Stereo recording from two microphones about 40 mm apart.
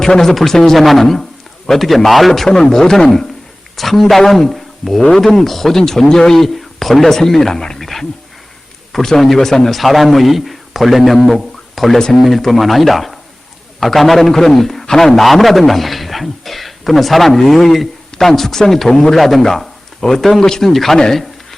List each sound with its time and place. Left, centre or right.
0.0 s a man's voice: centre
2.5 s a man's voice: centre
11.9 s speech: centre
12.2 s a man's voice: centre